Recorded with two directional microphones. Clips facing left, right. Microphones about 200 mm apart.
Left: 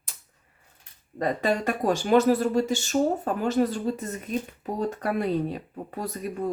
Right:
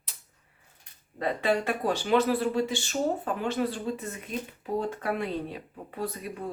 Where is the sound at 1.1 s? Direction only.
45° left (ahead or behind).